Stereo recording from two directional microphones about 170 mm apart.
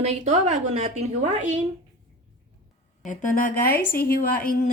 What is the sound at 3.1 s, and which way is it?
A woman's voice, 50° left (ahead or behind).